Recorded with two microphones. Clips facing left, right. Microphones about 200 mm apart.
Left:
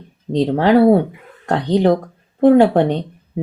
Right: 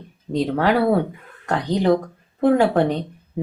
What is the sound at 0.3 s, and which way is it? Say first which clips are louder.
Speech: left 6 dB; 30° left (ahead or behind).